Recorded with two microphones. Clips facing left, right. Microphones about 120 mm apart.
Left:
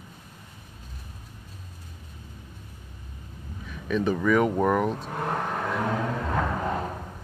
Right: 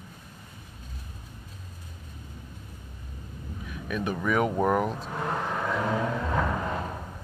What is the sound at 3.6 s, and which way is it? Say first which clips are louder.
Speech: left 5 dB; 5° right (ahead or behind).